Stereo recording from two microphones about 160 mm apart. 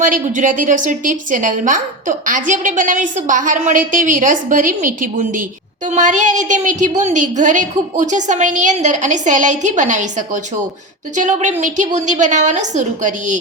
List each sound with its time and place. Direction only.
0.0 s a woman's voice: 55° right (ahead or behind)